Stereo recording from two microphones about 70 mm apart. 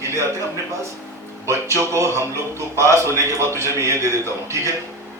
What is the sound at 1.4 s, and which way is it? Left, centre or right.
Speech, right.